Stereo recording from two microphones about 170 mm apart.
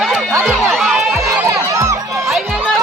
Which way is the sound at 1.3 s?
10° right (ahead or behind).